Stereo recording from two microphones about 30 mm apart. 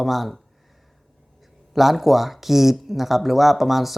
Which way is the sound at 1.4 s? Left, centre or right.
Centre.